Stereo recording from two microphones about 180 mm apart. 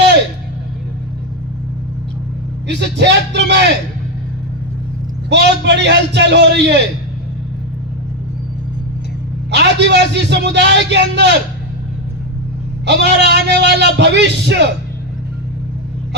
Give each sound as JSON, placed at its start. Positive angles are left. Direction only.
{"t": 2.6, "sound": "a man's voice", "side_deg": -70}
{"t": 5.3, "sound": "a man's voice", "side_deg": -75}
{"t": 9.5, "sound": "a man's voice", "side_deg": -70}
{"t": 12.8, "sound": "a man's voice", "side_deg": -70}